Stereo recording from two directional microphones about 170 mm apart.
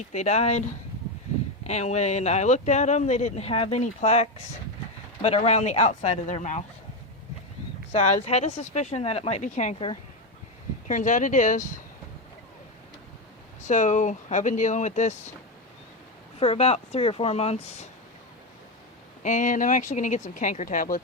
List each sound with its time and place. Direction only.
0.1 s speech: 40° left (ahead or behind)
1.6 s speech: 40° left (ahead or behind)
7.9 s speech: 45° left (ahead or behind)
13.7 s speech: 45° left (ahead or behind)
16.4 s speech: 35° left (ahead or behind)
19.2 s speech: 45° left (ahead or behind)